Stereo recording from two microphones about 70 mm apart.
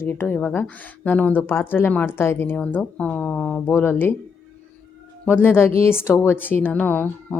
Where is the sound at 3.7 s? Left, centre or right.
Left.